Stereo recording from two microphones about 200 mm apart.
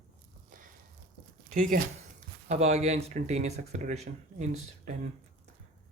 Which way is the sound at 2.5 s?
35° right (ahead or behind).